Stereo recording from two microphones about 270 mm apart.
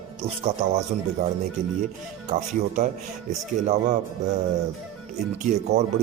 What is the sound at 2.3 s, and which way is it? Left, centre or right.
Speech, right.